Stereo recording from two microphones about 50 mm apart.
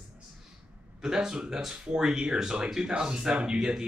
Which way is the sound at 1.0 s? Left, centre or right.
Centre.